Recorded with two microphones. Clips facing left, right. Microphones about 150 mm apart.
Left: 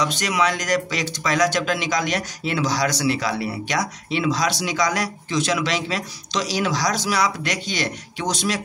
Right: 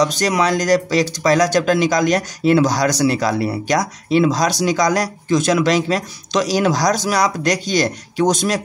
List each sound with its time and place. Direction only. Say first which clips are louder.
0.0 s speech: right 5 dB; 40° right (ahead or behind)